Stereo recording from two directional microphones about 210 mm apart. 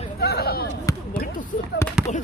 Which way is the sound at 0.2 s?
50° left (ahead or behind).